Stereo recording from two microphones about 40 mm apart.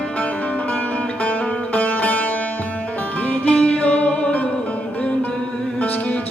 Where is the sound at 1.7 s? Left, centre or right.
Left.